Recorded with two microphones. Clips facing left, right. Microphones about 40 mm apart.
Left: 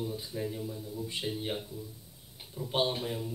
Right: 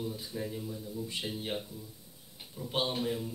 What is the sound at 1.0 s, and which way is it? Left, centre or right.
Speech, centre.